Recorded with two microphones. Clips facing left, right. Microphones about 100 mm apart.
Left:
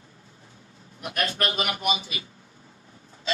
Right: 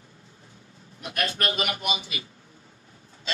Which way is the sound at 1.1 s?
35° left (ahead or behind).